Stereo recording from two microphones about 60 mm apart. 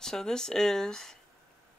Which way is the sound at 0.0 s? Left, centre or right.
Centre.